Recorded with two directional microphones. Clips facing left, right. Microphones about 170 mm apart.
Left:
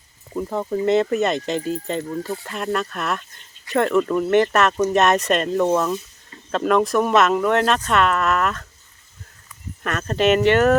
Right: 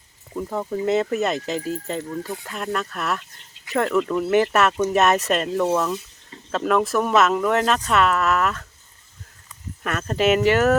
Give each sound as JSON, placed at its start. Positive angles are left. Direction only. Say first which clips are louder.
{"t": 0.3, "sound": "speech", "louder": "left 2 dB", "side_deg": 5}
{"t": 9.8, "sound": "speech", "louder": "left 1 dB", "side_deg": -5}